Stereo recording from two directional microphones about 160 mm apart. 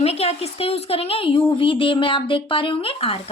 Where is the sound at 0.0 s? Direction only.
40° left (ahead or behind).